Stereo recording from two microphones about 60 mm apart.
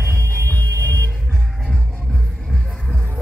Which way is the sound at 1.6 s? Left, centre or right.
Centre.